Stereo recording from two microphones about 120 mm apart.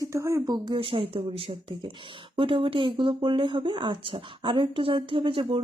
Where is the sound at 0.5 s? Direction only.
40° right (ahead or behind).